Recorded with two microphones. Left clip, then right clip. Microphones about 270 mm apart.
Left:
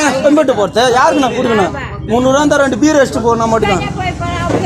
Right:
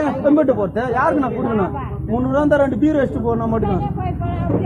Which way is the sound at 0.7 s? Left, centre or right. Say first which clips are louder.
Left 8 dB; centre.